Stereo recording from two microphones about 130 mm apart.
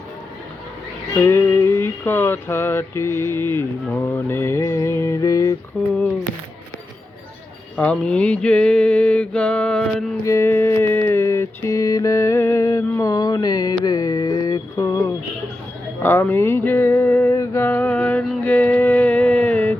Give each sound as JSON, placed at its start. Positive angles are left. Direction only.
{"t": 1.1, "sound": "music", "side_deg": 20}
{"t": 5.7, "sound": "mantra", "side_deg": 10}
{"t": 7.8, "sound": "mantra", "side_deg": 10}
{"t": 10.2, "sound": "mantra", "side_deg": 20}
{"t": 16.0, "sound": "music", "side_deg": 15}